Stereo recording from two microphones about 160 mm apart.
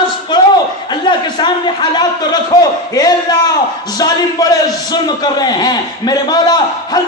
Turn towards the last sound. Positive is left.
turn(degrees=25)  # may be behind; listen again after turning